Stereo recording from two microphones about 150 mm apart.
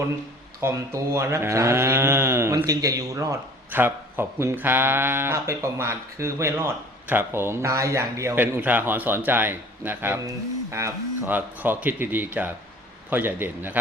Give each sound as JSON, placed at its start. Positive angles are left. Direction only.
{"t": 0.6, "sound": "speech", "side_deg": -20}